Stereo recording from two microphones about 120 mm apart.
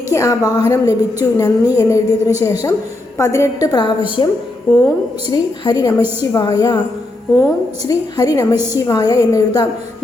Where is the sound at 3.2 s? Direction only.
25° left (ahead or behind).